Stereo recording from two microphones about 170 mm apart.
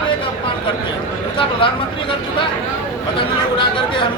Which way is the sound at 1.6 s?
30° left (ahead or behind).